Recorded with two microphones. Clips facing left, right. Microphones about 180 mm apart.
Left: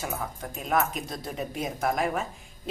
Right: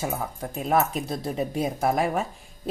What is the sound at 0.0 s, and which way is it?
Speech, 30° right (ahead or behind).